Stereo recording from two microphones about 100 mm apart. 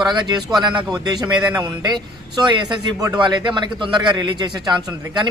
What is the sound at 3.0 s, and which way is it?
A man's voice, 45° right (ahead or behind).